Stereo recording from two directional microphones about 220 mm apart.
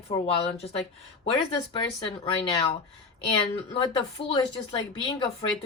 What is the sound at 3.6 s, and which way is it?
Speech, 25° left (ahead or behind).